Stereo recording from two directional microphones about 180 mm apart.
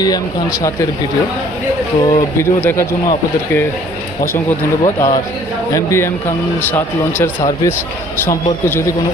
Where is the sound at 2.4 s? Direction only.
15° left (ahead or behind).